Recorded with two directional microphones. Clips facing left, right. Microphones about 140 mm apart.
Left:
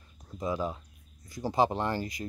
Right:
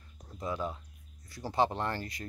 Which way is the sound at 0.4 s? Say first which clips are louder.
Left 4 dB; 15° left (ahead or behind).